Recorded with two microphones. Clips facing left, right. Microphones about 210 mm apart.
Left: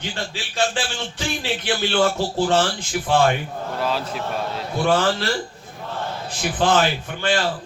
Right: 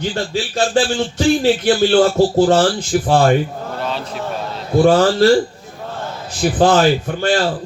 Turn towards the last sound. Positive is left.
turn(degrees=-40)  # may be behind; listen again after turning